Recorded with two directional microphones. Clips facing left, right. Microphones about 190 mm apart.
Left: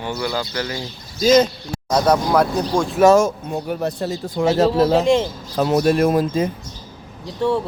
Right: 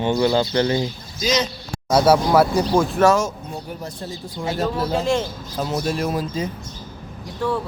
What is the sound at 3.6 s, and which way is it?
Speech, 75° left (ahead or behind).